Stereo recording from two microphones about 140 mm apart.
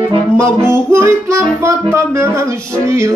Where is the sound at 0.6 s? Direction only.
20° right (ahead or behind).